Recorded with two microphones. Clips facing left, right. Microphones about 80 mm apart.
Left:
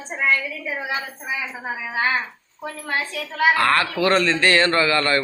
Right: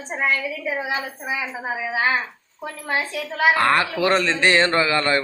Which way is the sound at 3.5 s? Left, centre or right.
Right.